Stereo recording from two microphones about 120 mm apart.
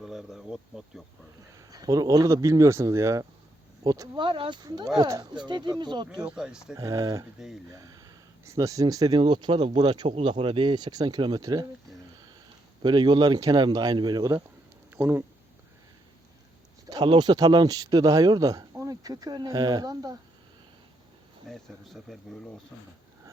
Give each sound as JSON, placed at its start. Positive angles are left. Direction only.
{"t": 0.0, "sound": "insect", "side_deg": -5}
{"t": 1.5, "sound": "speech", "side_deg": -30}
{"t": 4.2, "sound": "speech", "side_deg": -40}
{"t": 6.2, "sound": "speech", "side_deg": -5}
{"t": 6.7, "sound": "speech", "side_deg": -30}
{"t": 7.3, "sound": "speech", "side_deg": -5}
{"t": 7.8, "sound": "speech", "side_deg": -30}
{"t": 9.6, "sound": "speech", "side_deg": -50}
{"t": 9.9, "sound": "speech", "side_deg": -40}
{"t": 12.8, "sound": "speech", "side_deg": -35}
{"t": 14.9, "sound": "speech", "side_deg": -20}
{"t": 16.9, "sound": "speech", "side_deg": -35}
{"t": 21.5, "sound": "speech", "side_deg": 0}